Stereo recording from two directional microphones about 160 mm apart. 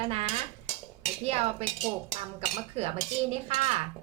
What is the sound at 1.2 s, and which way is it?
Dishes, 40° right (ahead or behind).